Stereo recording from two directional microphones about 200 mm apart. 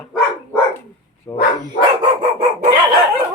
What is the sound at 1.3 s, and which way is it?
Dog, 15° left (ahead or behind).